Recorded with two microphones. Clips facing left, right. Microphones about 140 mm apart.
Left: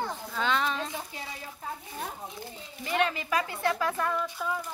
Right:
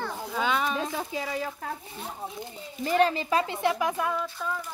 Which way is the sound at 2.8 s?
35° right (ahead or behind).